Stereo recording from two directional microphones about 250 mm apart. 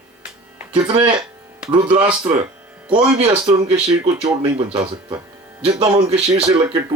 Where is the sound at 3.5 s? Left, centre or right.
Centre.